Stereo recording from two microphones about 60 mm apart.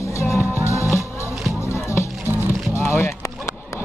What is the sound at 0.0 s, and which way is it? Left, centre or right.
Music, left.